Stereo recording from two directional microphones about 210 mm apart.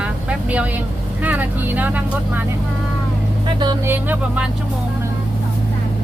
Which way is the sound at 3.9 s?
10° right (ahead or behind).